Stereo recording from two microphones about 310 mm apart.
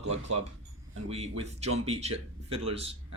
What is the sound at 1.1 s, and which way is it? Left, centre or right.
Speech, centre.